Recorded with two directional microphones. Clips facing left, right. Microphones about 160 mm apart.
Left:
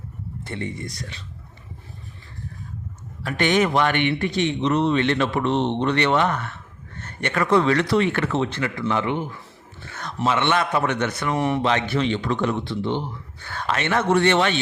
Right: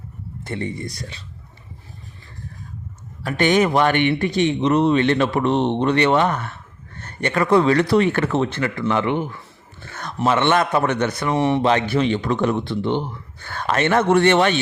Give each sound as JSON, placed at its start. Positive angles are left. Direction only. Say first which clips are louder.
{"t": 0.4, "sound": "a man's voice", "louder": "right 4 dB", "side_deg": -40}
{"t": 3.2, "sound": "a man's voice", "louder": "right 3 dB", "side_deg": -40}
{"t": 9.9, "sound": "a man's voice", "louder": "right 3 dB", "side_deg": -45}
{"t": 11.6, "sound": "a man's voice", "louder": "right 4 dB", "side_deg": -40}